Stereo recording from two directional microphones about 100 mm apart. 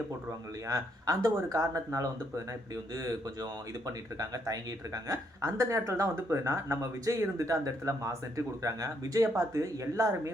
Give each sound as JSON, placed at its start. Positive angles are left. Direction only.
{"t": 0.3, "sound": "speech", "side_deg": -35}